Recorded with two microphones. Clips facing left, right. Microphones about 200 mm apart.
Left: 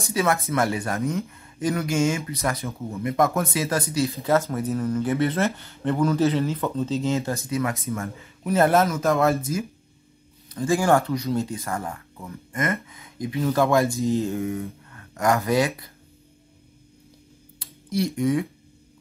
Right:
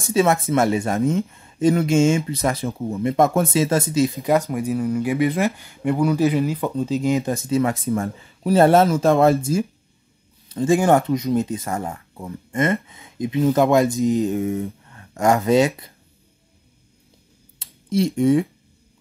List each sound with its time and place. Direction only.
0.1 s speech: 25° right (ahead or behind)
7.4 s speech: 30° right (ahead or behind)
17.6 s a sound: 25° right (ahead or behind)